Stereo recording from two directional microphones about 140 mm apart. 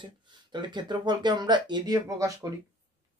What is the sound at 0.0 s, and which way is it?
Speech, 35° right (ahead or behind).